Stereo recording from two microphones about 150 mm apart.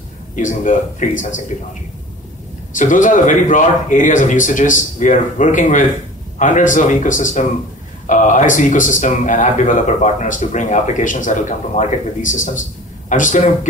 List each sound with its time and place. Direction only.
0.4 s speech: 60° left (ahead or behind)
2.7 s speech: 60° left (ahead or behind)